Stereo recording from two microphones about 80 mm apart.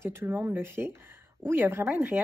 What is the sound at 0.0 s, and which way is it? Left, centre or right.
A woman's voice, right.